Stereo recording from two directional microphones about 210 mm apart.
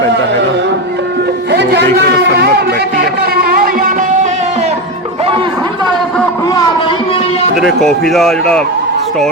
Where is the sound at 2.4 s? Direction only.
50° right (ahead or behind); by 4.7 s 35° right (ahead or behind).